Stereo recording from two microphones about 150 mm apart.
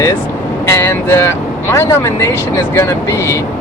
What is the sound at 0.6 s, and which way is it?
Speech, 15° left (ahead or behind).